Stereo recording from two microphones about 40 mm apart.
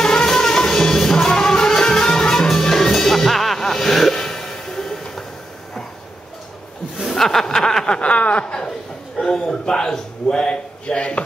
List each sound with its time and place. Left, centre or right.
0.0 s music: centre
4.1 s a sound: centre
7.2 s snicker: centre
8.0 s snicker: left
9.2 s a man's voice: centre